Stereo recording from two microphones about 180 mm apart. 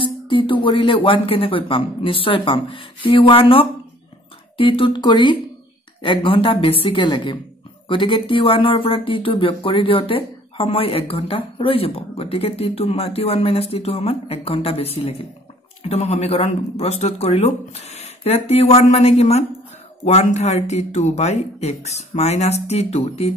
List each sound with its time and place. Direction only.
0.0 s speech: 30° left (ahead or behind)